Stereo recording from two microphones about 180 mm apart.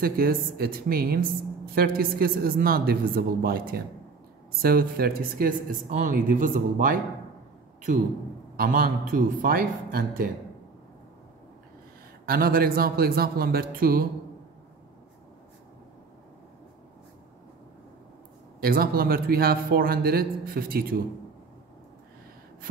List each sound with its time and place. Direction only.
0.0 s a man's voice: 55° right (ahead or behind)
8.5 s speech: 55° right (ahead or behind)
12.3 s a man's voice: 55° right (ahead or behind)
18.6 s a man's voice: 55° right (ahead or behind)